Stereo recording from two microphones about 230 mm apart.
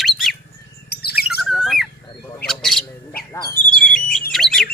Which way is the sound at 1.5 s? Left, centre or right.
Centre.